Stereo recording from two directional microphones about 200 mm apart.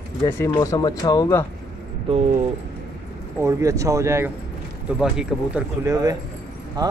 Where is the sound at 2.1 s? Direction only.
30° right (ahead or behind).